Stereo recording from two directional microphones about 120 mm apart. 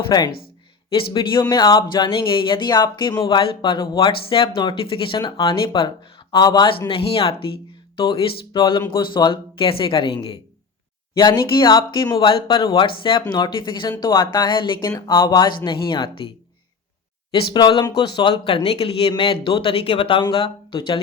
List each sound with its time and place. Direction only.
0.9 s speech: 45° left (ahead or behind)
17.3 s speech: 40° left (ahead or behind)